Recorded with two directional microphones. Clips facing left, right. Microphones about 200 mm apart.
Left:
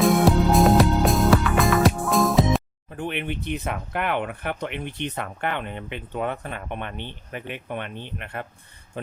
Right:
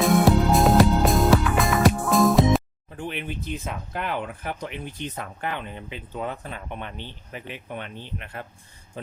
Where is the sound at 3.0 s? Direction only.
60° left (ahead or behind).